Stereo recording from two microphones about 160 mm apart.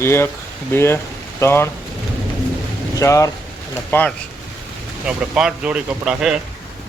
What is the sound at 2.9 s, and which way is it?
Speech, 20° left (ahead or behind).